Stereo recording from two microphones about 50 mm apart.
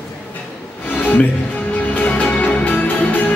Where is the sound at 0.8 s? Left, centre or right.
Left.